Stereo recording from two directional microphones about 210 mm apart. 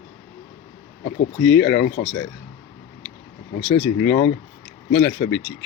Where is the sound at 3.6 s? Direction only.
55° left (ahead or behind).